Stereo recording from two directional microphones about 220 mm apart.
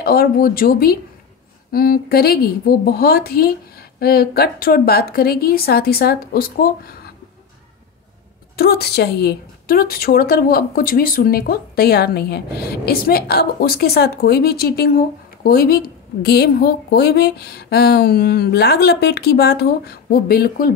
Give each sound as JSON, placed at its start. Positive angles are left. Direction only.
{"t": 0.0, "sound": "a woman's voice", "side_deg": 45}
{"t": 8.5, "sound": "a woman's voice", "side_deg": 45}